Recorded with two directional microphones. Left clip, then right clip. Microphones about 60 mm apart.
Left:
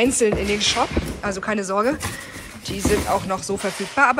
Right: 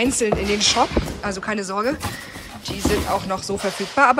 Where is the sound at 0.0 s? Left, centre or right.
Right.